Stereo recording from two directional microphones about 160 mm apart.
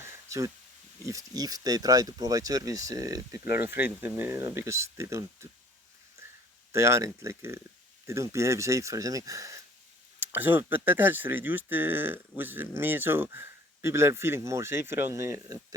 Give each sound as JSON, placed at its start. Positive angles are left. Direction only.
{"t": 0.0, "sound": "a sound", "side_deg": -20}
{"t": 1.0, "sound": "speech", "side_deg": -20}
{"t": 6.7, "sound": "speech", "side_deg": -15}